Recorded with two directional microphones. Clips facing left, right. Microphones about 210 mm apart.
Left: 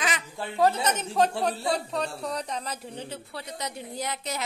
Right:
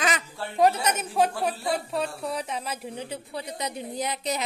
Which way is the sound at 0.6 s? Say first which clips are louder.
Right 2 dB; 15° right (ahead or behind).